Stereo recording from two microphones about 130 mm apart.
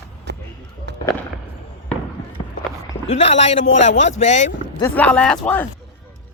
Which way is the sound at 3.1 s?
50° left (ahead or behind).